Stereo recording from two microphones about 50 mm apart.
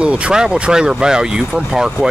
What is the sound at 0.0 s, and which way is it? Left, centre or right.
Speech, centre.